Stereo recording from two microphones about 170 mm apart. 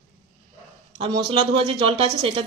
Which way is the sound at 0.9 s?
30° right (ahead or behind).